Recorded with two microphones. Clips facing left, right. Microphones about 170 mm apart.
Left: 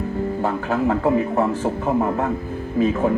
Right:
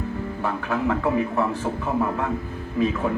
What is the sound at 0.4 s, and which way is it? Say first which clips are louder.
Speech: left 2 dB; 40° left (ahead or behind).